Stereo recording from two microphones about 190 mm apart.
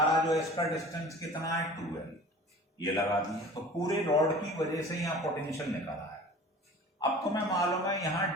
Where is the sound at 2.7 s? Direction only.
20° left (ahead or behind).